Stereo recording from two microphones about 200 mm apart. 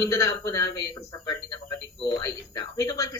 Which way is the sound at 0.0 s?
15° left (ahead or behind).